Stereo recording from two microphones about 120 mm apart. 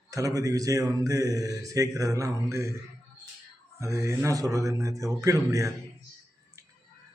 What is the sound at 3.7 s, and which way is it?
Speech, 25° right (ahead or behind).